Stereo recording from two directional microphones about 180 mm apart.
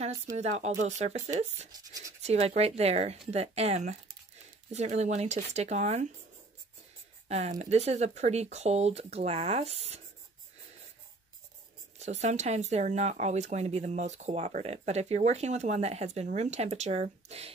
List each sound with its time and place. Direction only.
0.4 s speech: 40° right (ahead or behind)
1.7 s speech: 20° right (ahead or behind)
2.2 s speech: 35° right (ahead or behind)
7.2 s speech: 40° right (ahead or behind)
12.0 s speech: 40° right (ahead or behind)